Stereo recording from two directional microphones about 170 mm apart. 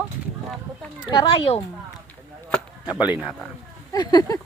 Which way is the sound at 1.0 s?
25° left (ahead or behind).